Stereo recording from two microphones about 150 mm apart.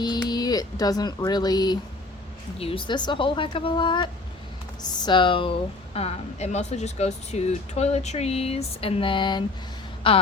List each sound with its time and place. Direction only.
0.0 s speech: 25° left (ahead or behind)
2.6 s a woman's voice: 40° left (ahead or behind)